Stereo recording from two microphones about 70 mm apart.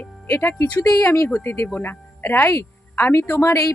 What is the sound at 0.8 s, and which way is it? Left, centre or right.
Speech, left.